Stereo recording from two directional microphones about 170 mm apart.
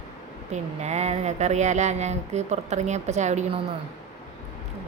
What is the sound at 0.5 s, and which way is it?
Speech, 40° right (ahead or behind).